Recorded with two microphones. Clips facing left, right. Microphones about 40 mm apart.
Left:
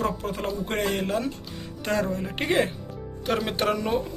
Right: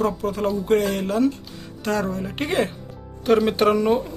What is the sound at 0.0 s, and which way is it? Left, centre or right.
A woman's voice, centre.